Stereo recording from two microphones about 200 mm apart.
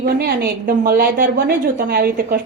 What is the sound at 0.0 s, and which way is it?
A woman's voice, 50° right (ahead or behind).